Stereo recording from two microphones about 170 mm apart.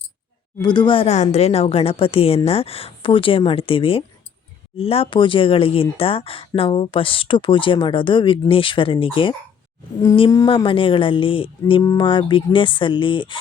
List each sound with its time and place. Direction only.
0.6 s speech: 25° left (ahead or behind)